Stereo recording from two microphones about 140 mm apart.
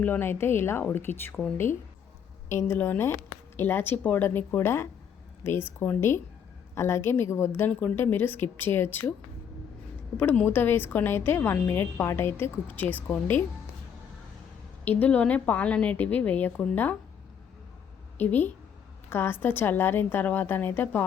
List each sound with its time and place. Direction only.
0.0 s a woman's voice: 15° left (ahead or behind)
10.2 s a woman's voice: 15° left (ahead or behind)
14.8 s a woman's voice: 10° left (ahead or behind)
18.2 s a woman's voice: 15° left (ahead or behind)